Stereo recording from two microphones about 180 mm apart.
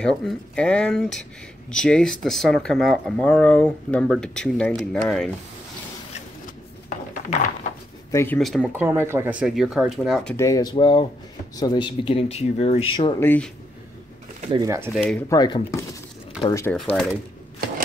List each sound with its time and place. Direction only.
0.0 s speech: 5° left (ahead or behind)
7.2 s speech: 45° left (ahead or behind)
8.1 s speech: 15° left (ahead or behind)
8.4 s speech: centre (ahead or behind)
8.7 s speech: 10° right (ahead or behind)
10.3 s speech: 20° left (ahead or behind)
13.2 s speech: 10° left (ahead or behind)
14.5 s speech: 20° right (ahead or behind)
14.9 s speech: centre (ahead or behind)
15.2 s speech: 20° left (ahead or behind)
16.7 s speech: 5° left (ahead or behind)